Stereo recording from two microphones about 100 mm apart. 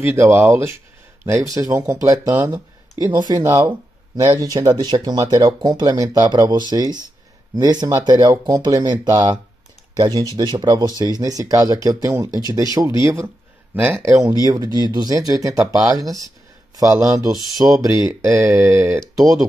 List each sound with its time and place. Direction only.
0.0 s speech: 25° right (ahead or behind)
3.1 s speech: 45° right (ahead or behind)
3.4 s speech: 30° right (ahead or behind)
4.3 s speech: 40° right (ahead or behind)
13.0 s speech: 30° right (ahead or behind)
13.7 s speech: 20° right (ahead or behind)
14.0 s speech: 30° right (ahead or behind)